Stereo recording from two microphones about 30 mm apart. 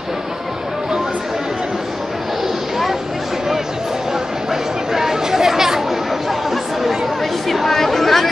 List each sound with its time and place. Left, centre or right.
4.5 s chatter: centre
7.4 s chatter: centre